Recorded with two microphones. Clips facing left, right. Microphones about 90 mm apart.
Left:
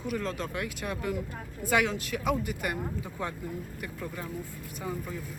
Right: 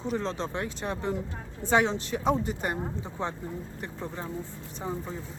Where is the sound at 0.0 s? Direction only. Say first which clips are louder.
Right 2 dB; 25° right (ahead or behind).